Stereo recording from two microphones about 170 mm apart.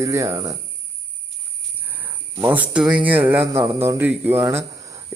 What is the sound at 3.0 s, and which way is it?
Speech, 10° right (ahead or behind).